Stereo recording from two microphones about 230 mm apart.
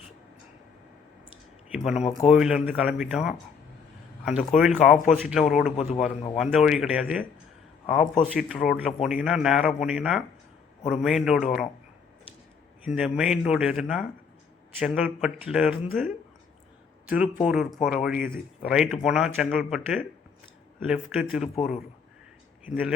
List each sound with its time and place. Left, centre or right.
1.7 s speech: centre
5.7 s a man's voice: left
6.3 s speech: centre
12.8 s speech: centre
17.4 s speech: centre
22.6 s a man's voice: centre